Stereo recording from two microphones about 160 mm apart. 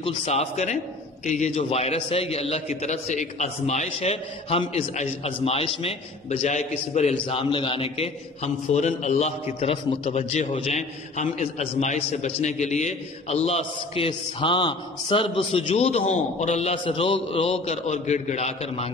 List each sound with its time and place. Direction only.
0.0 s a man's voice: 40° left (ahead or behind)
7.2 s a man's voice: 30° left (ahead or behind)
16.8 s a man's voice: 35° left (ahead or behind)